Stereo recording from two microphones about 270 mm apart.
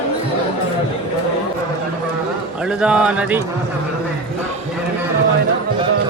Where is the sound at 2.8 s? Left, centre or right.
Centre.